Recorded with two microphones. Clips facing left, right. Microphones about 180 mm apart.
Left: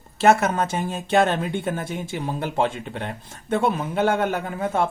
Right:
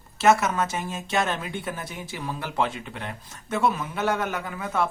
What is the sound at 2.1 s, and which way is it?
Speech, 25° left (ahead or behind).